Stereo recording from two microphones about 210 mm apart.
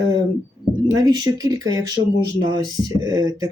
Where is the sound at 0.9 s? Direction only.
20° right (ahead or behind).